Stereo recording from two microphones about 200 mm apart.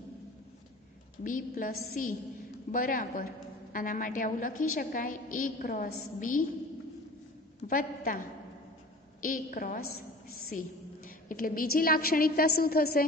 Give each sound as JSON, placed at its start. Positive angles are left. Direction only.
{"t": 1.2, "sound": "a woman's voice", "side_deg": 40}
{"t": 7.6, "sound": "a woman's voice", "side_deg": 45}
{"t": 9.2, "sound": "a woman's voice", "side_deg": 45}
{"t": 11.2, "sound": "a woman's voice", "side_deg": 45}